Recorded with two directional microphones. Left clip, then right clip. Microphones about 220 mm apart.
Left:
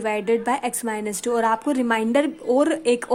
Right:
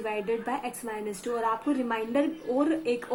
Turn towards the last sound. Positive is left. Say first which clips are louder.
# left 7 dB
turn(degrees=50)  # may be behind; listen again after turning